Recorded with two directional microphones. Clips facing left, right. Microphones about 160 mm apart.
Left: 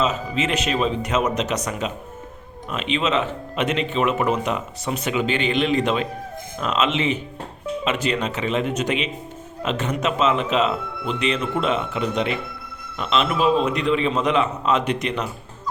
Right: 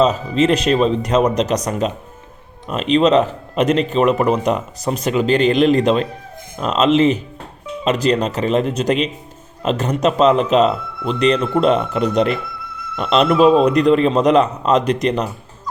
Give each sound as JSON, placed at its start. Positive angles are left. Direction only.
{"t": 0.0, "sound": "a man's voice", "side_deg": -35}